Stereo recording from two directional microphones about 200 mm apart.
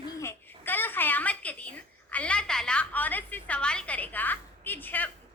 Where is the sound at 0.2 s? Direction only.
10° left (ahead or behind).